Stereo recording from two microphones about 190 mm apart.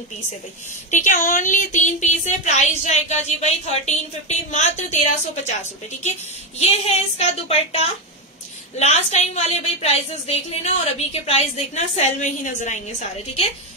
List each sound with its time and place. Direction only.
0.8 s a woman's voice: 40° left (ahead or behind)
6.6 s a woman's voice: 35° left (ahead or behind)